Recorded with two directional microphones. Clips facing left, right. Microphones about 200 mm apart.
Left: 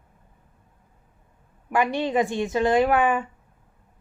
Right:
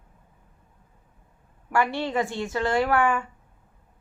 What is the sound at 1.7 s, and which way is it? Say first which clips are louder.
A woman's voice: left 2 dB; 15° left (ahead or behind).